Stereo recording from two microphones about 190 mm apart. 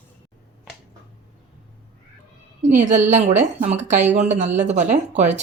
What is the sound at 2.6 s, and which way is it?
A woman's voice, 40° right (ahead or behind).